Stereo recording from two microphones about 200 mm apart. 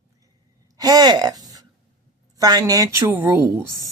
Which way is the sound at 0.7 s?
20° right (ahead or behind).